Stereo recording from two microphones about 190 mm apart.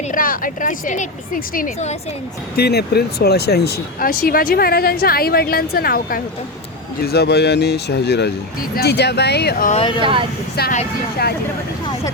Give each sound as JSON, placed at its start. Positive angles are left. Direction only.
{"t": 0.1, "sound": "speech", "side_deg": 45}
{"t": 2.6, "sound": "speech", "side_deg": 55}
{"t": 10.0, "sound": "speech", "side_deg": -25}
{"t": 10.6, "sound": "speech", "side_deg": 55}